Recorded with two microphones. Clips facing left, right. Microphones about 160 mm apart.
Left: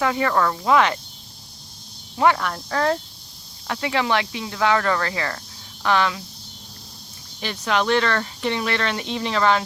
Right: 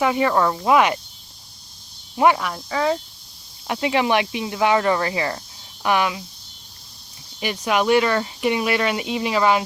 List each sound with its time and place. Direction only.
0.0 s speech: 15° right (ahead or behind)
2.1 s speech: 15° right (ahead or behind)
2.4 s speech: 5° right (ahead or behind)
3.7 s speech: 20° right (ahead or behind)
7.4 s speech: 10° right (ahead or behind)